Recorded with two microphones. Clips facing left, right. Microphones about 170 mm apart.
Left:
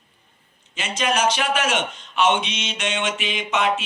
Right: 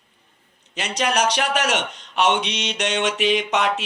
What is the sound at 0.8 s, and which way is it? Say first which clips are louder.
Mantra: right 1 dB; 70° right (ahead or behind).